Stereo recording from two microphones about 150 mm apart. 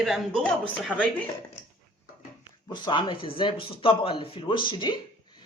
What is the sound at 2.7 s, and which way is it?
Speech, 30° left (ahead or behind).